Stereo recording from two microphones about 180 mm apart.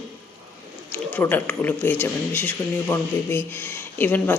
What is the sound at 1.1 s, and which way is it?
A woman's voice, 10° left (ahead or behind).